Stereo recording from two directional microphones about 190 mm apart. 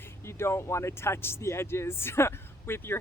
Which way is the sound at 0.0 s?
15° left (ahead or behind).